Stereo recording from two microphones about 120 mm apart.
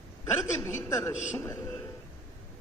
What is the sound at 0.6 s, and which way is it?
Speech, 20° left (ahead or behind).